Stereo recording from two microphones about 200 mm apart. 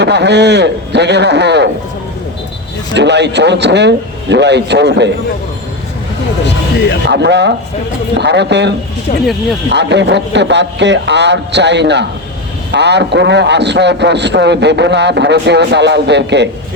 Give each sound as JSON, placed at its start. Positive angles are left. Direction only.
{"t": 0.0, "sound": "a man's voice", "side_deg": -60}
{"t": 2.9, "sound": "a man's voice", "side_deg": -60}
{"t": 7.1, "sound": "a man's voice", "side_deg": -60}